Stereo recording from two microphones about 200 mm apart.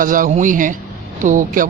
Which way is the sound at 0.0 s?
40° right (ahead or behind).